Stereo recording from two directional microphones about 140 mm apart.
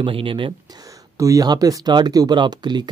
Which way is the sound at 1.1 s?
25° right (ahead or behind).